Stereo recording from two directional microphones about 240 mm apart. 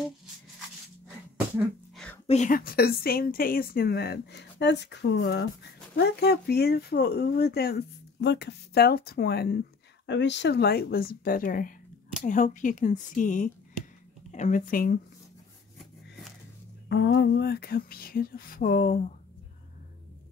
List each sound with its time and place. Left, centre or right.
2.2 s speech: left
16.9 s speech: left